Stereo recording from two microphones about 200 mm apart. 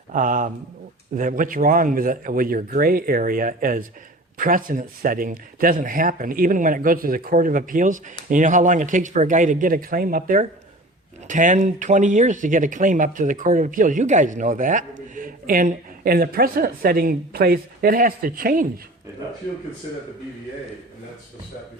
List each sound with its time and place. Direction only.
0.1 s speech: 40° right (ahead or behind)